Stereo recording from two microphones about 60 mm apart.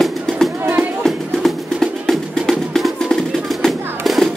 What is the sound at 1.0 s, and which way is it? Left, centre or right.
Music, centre.